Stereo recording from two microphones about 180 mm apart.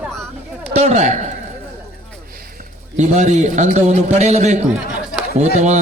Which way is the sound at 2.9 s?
40° right (ahead or behind).